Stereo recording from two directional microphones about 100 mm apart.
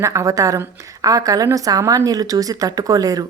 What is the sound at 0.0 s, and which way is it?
A woman's voice, 30° right (ahead or behind).